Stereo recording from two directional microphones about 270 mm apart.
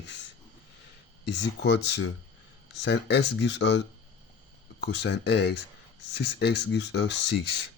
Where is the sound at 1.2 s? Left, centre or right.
Left.